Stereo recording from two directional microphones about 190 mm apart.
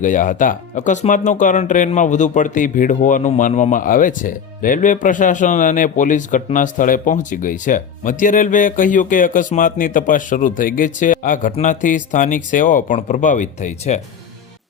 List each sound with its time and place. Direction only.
0.0 s speech: 45° left (ahead or behind)